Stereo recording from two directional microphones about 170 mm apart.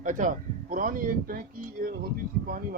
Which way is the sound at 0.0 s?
50° right (ahead or behind).